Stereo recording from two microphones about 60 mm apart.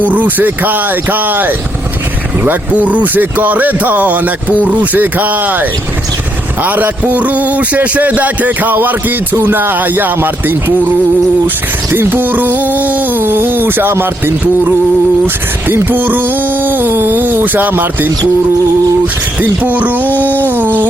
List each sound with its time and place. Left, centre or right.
0.0 s music: right
2.4 s speech: right
6.6 s music: right
11.9 s music: right
15.6 s music: right
19.4 s music: right